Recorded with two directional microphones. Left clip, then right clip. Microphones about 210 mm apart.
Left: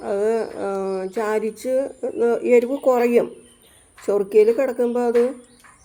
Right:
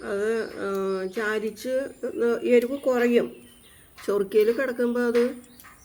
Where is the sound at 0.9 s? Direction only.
15° left (ahead or behind).